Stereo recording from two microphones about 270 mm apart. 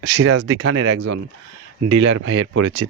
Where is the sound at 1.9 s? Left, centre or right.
Right.